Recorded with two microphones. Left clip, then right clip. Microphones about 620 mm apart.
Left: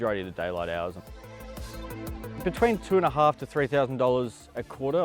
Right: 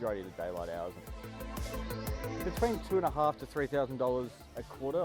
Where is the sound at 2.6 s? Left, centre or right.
Left.